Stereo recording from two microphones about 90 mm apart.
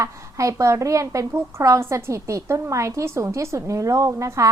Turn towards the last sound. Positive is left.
turn(degrees=-35)  # may be behind; listen again after turning